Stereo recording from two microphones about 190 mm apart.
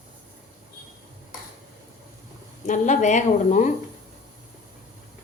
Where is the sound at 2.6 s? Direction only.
40° left (ahead or behind).